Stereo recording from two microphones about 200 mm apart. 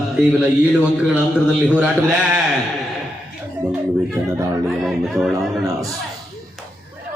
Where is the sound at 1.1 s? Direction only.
5° right (ahead or behind).